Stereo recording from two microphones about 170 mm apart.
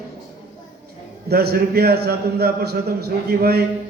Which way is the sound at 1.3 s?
70° right (ahead or behind).